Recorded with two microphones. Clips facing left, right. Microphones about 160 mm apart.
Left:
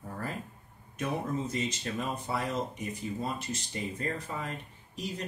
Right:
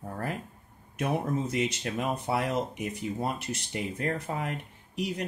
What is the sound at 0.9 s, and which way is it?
Speech, 65° right (ahead or behind).